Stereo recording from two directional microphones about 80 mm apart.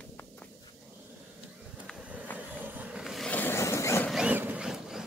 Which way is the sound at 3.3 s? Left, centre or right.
Left.